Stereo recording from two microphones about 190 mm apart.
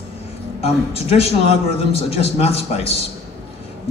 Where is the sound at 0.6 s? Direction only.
30° left (ahead or behind).